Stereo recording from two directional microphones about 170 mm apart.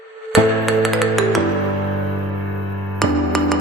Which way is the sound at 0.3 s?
Centre (ahead or behind).